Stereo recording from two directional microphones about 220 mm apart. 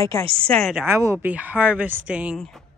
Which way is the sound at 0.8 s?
10° right (ahead or behind).